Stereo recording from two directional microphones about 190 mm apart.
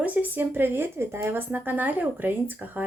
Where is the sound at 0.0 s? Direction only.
10° right (ahead or behind).